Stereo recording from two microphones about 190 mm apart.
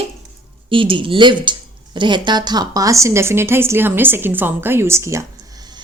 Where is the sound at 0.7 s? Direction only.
25° right (ahead or behind).